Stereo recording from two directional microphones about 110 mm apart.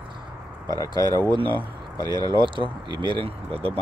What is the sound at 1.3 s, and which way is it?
Speech, 45° right (ahead or behind).